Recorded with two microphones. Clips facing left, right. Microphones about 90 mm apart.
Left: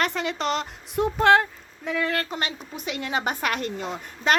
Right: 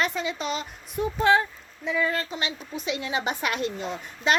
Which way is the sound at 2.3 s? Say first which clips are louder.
Left 1 dB; 50° left (ahead or behind).